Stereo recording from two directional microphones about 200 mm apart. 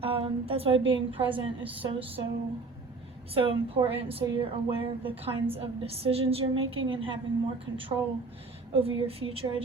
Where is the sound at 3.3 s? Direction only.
30° right (ahead or behind).